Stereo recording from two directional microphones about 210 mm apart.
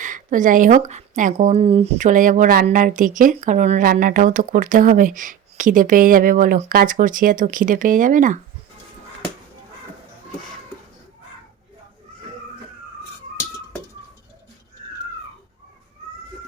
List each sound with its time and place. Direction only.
0.0 s speech: 40° right (ahead or behind)